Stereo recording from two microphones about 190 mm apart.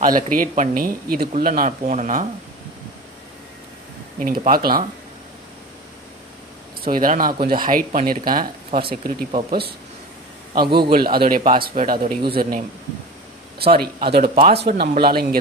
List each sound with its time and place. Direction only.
0.0 s speech: 45° right (ahead or behind)
4.2 s speech: 50° right (ahead or behind)
6.8 s speech: 50° right (ahead or behind)
10.6 s a man's voice: 25° right (ahead or behind)
10.9 s speech: 50° right (ahead or behind)
14.3 s a man's voice: 30° right (ahead or behind)
14.6 s speech: 55° right (ahead or behind)